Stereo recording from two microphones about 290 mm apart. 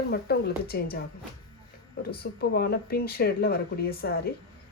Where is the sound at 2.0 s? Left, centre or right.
Left.